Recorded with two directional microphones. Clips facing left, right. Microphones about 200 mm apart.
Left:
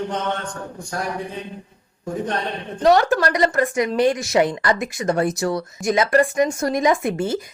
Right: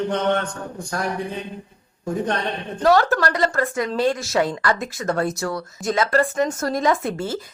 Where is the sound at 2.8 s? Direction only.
20° left (ahead or behind).